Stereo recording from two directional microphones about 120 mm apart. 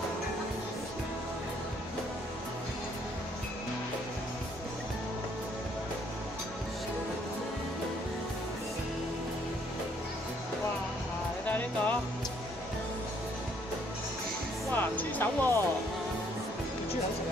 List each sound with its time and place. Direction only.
11.4 s music: 15° left (ahead or behind)
14.7 s music: 15° left (ahead or behind)